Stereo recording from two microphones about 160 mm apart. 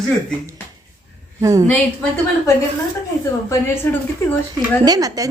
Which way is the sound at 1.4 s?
20° right (ahead or behind).